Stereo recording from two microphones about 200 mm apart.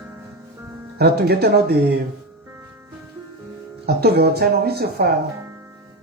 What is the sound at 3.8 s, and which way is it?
A man's voice, 55° right (ahead or behind).